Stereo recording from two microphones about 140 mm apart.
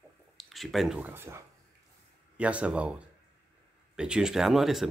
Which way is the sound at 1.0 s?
15° right (ahead or behind).